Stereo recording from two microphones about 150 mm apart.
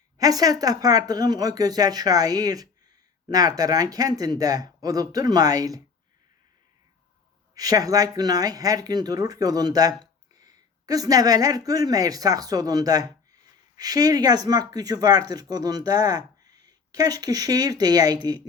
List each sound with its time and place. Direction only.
0.2 s speech: 25° right (ahead or behind)
7.5 s speech: 25° right (ahead or behind)